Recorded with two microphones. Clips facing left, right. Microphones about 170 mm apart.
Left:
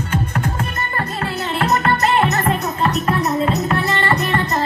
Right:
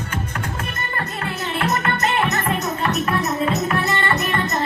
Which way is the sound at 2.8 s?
30° left (ahead or behind).